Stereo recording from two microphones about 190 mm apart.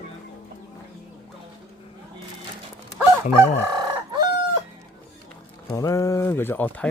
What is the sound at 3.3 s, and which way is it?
Fowl, 15° right (ahead or behind).